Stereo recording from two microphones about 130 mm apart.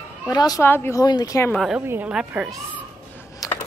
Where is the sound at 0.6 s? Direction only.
15° left (ahead or behind).